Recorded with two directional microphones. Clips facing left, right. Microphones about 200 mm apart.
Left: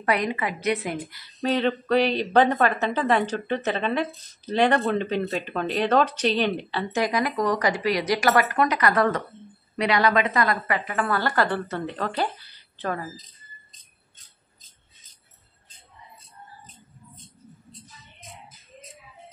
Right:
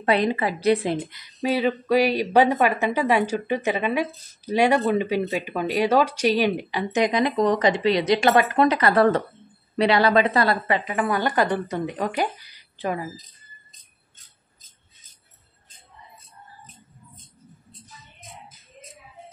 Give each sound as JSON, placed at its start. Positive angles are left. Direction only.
{"t": 0.0, "sound": "a woman's voice", "side_deg": -30}
{"t": 1.4, "sound": "a woman's voice", "side_deg": -10}